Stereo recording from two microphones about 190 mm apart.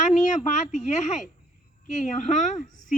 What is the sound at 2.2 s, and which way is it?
Speech, 40° left (ahead or behind).